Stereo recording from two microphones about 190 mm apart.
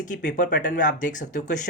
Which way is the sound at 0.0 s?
45° left (ahead or behind).